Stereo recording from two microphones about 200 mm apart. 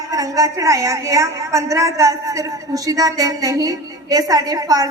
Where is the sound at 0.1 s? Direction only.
15° right (ahead or behind).